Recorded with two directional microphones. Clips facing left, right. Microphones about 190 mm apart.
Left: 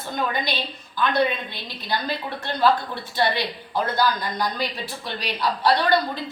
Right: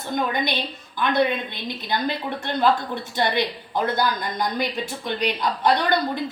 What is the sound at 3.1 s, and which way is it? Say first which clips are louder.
A woman's voice: even; 20° right (ahead or behind).